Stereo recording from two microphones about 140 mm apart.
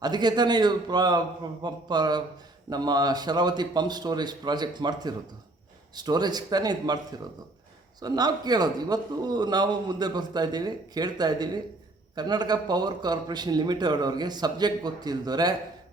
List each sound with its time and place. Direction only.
0.0 s a man's voice: 30° right (ahead or behind)